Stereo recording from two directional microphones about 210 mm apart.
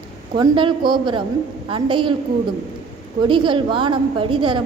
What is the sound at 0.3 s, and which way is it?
A woman's voice, 20° right (ahead or behind).